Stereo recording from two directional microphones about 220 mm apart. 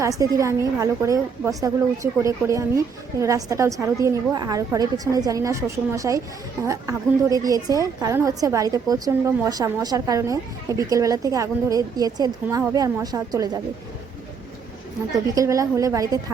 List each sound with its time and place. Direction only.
0.0 s a woman's voice: 15° right (ahead or behind)
15.4 s a woman's voice: 15° right (ahead or behind)